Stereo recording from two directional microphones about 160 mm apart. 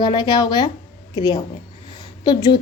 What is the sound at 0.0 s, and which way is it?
A woman's voice, 30° left (ahead or behind).